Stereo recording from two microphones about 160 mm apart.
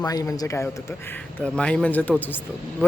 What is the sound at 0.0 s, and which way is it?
Speech, 20° left (ahead or behind).